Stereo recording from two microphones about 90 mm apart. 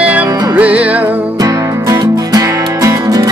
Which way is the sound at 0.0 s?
15° right (ahead or behind).